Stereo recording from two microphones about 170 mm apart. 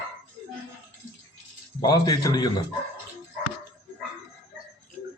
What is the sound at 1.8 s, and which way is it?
Speech, 20° left (ahead or behind).